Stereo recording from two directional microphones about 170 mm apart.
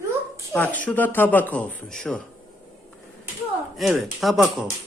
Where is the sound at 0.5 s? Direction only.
10° left (ahead or behind).